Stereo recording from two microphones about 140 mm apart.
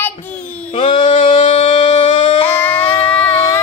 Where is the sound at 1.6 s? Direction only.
45° left (ahead or behind).